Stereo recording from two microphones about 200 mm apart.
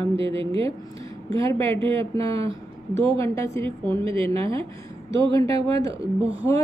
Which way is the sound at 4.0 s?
25° right (ahead or behind).